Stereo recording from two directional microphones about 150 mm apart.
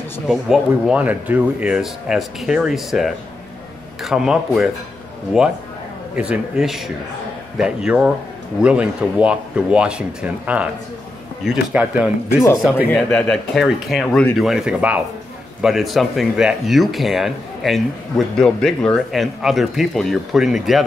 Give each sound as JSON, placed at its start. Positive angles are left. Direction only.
{"t": 0.3, "sound": "speech", "side_deg": -5}
{"t": 11.7, "sound": "speech", "side_deg": -10}
{"t": 12.8, "sound": "speech", "side_deg": 15}